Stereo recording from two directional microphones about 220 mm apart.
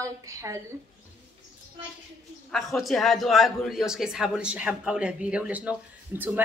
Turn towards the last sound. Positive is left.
turn(degrees=-10)  # may be behind; listen again after turning